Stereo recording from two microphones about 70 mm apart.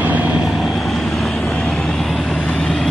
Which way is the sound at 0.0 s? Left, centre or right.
Right.